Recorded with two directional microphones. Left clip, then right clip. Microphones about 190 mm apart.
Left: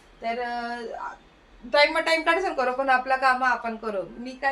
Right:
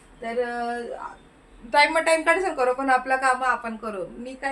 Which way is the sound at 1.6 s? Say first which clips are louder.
Right 2 dB; 20° right (ahead or behind).